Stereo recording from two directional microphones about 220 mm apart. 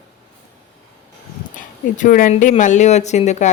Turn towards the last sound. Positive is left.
turn(degrees=30)  # may be behind; listen again after turning